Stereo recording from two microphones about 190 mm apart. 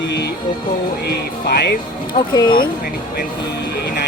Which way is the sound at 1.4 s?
55° left (ahead or behind).